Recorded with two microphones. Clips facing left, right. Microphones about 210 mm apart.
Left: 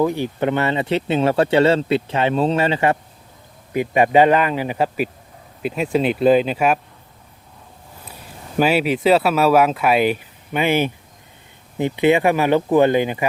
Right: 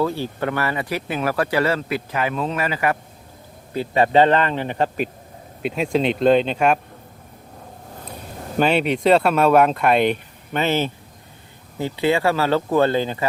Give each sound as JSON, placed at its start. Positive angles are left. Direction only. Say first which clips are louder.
{"t": 0.0, "sound": "speech", "louder": "left 3 dB", "side_deg": 15}
{"t": 3.7, "sound": "speech", "louder": "left 2 dB", "side_deg": 15}
{"t": 8.5, "sound": "speech", "louder": "left 1 dB", "side_deg": 5}